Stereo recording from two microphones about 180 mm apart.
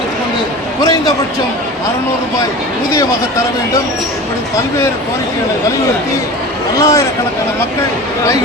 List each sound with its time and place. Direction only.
0.8 s a sound: 20° left (ahead or behind)
2.9 s speech: 20° left (ahead or behind)
6.7 s speech: 20° left (ahead or behind)